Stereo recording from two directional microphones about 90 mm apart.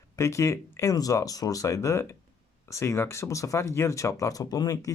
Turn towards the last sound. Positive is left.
turn(degrees=45)  # may be behind; listen again after turning